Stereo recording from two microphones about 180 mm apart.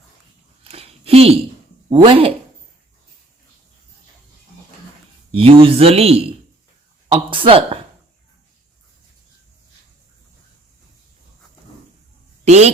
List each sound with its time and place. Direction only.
0.6 s a sound: 35° right (ahead or behind)
1.9 s speech: 30° right (ahead or behind)
5.3 s speech: 30° right (ahead or behind)
12.5 s speech: 35° right (ahead or behind)